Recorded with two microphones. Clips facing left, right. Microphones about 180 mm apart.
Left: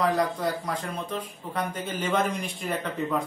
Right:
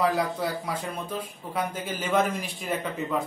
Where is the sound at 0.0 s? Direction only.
5° right (ahead or behind).